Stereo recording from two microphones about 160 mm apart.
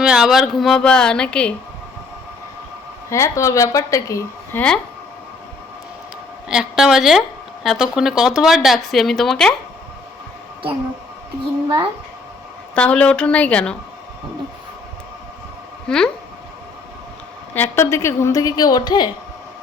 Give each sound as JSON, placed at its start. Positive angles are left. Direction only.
{"t": 0.0, "sound": "speech", "side_deg": -5}
{"t": 3.1, "sound": "a woman's voice", "side_deg": 20}
{"t": 6.5, "sound": "speech", "side_deg": -5}
{"t": 12.7, "sound": "a woman's voice", "side_deg": 10}
{"t": 15.9, "sound": "speech", "side_deg": 5}
{"t": 17.5, "sound": "a woman's voice", "side_deg": 15}